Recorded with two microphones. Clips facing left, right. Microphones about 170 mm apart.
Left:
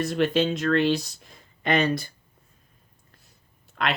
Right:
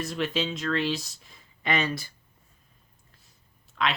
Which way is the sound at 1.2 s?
50° left (ahead or behind).